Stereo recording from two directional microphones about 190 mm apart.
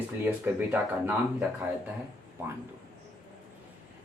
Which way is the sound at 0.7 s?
10° right (ahead or behind).